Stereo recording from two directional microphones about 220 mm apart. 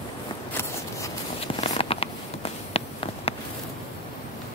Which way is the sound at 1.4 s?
25° left (ahead or behind).